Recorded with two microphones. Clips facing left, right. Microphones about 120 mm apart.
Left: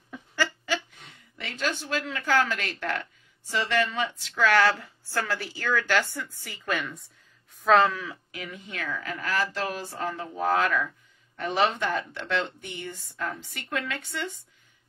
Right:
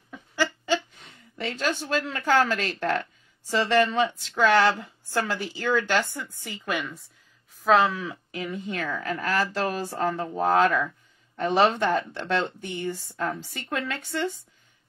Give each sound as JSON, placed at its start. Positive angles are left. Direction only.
{"t": 0.7, "sound": "a sound", "side_deg": -35}
{"t": 1.9, "sound": "a woman's voice", "side_deg": -35}
{"t": 7.9, "sound": "a woman's voice", "side_deg": -20}
{"t": 8.3, "sound": "speech", "side_deg": -30}